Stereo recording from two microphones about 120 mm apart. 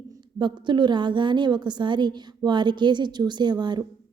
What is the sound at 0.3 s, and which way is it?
A woman's voice, 40° right (ahead or behind).